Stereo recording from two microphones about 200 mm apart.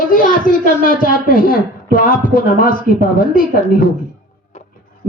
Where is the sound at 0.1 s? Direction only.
45° left (ahead or behind).